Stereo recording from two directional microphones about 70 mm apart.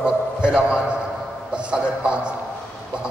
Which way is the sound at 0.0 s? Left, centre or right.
Centre.